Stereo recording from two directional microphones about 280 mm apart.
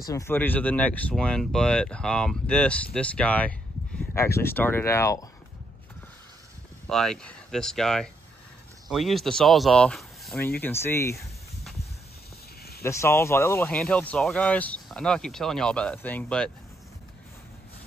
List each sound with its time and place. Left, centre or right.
0.1 s speech: centre
6.9 s speech: centre
12.8 s speech: centre